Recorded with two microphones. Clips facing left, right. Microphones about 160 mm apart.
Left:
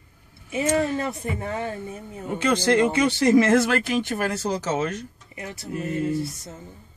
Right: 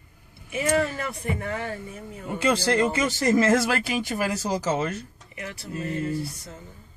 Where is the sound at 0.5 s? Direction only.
25° left (ahead or behind).